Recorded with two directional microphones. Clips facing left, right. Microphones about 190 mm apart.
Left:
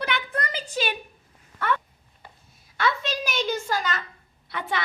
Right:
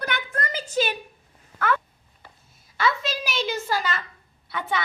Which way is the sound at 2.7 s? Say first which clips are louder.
Right 1 dB; 5° right (ahead or behind).